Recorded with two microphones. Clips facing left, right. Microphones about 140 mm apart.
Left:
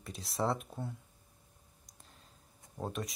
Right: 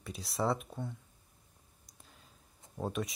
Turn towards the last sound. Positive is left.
turn(degrees=0)  # may be behind; listen again after turning